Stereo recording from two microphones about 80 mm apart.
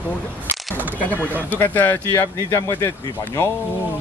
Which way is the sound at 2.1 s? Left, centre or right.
Left.